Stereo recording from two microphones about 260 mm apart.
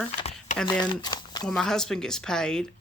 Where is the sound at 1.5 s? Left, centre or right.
Centre.